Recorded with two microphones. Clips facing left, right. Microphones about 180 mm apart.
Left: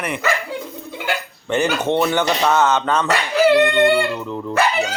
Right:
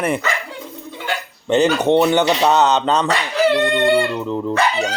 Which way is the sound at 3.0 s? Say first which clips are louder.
Left 1 dB; 5° left (ahead or behind).